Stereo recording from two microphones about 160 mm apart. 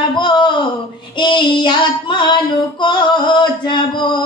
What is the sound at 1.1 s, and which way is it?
Child singing, 30° left (ahead or behind).